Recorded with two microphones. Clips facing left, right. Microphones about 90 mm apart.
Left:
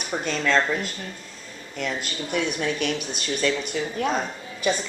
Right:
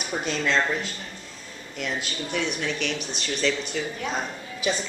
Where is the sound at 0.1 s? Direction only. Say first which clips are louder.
Left 1 dB; 65° left (ahead or behind).